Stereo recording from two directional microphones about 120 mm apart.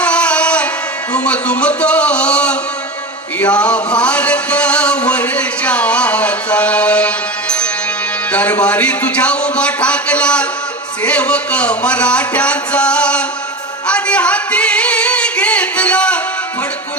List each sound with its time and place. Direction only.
0.0 s music: 10° left (ahead or behind)
1.1 s speech: 10° left (ahead or behind)
3.4 s music: 10° left (ahead or behind)
8.3 s speech: 10° left (ahead or behind)
13.8 s singing: 10° left (ahead or behind)